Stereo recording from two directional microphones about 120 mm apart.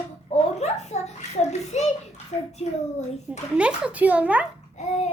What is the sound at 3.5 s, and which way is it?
Speech, 10° right (ahead or behind).